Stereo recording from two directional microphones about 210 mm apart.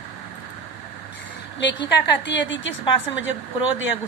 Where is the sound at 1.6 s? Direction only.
55° left (ahead or behind).